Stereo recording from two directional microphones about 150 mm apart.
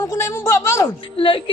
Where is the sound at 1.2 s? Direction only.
35° left (ahead or behind).